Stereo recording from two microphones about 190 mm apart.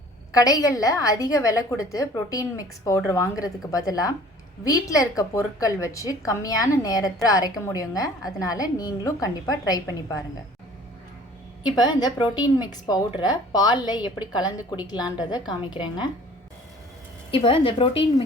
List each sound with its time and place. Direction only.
0.3 s a woman's voice: 20° left (ahead or behind)
11.8 s a woman's voice: 20° left (ahead or behind)
17.3 s a woman's voice: 30° left (ahead or behind)